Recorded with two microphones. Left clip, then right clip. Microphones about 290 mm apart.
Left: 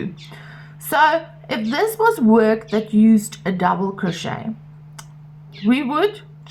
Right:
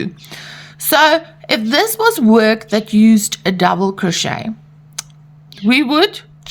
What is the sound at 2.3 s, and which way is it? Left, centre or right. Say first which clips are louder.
Speech: right 4 dB; right.